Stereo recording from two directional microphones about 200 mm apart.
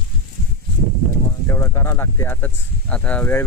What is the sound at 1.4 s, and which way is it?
Speech, 15° left (ahead or behind).